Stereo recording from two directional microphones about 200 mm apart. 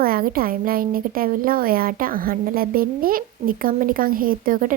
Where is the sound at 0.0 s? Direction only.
45° right (ahead or behind).